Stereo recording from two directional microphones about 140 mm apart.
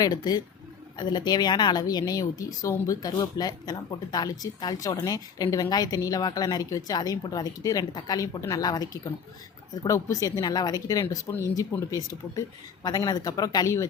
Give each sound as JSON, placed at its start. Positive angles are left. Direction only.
{"t": 0.0, "sound": "a woman's voice", "side_deg": 30}